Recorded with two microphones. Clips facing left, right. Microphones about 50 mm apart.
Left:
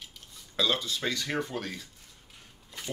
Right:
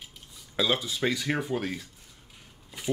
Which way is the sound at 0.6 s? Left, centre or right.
Centre.